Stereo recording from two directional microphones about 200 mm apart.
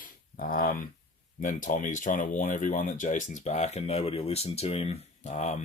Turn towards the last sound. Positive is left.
turn(degrees=35)  # may be behind; listen again after turning